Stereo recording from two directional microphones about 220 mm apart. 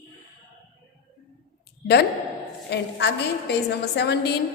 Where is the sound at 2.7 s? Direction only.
50° left (ahead or behind).